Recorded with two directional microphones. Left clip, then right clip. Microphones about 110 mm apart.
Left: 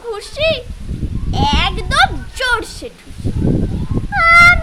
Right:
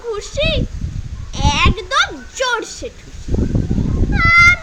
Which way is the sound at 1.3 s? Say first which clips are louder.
Even; 30° left (ahead or behind).